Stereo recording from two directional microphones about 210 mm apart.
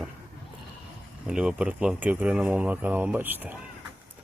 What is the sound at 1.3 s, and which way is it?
Speech, 5° right (ahead or behind).